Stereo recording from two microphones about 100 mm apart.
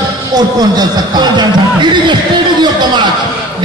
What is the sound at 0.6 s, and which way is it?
A man's voice, 45° right (ahead or behind).